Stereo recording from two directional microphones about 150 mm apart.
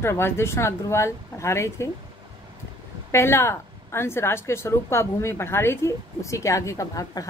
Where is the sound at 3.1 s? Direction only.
15° left (ahead or behind).